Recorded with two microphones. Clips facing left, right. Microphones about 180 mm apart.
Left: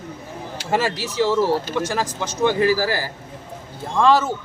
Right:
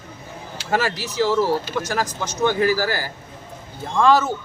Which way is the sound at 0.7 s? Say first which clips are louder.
Left 1 dB; 30° left (ahead or behind).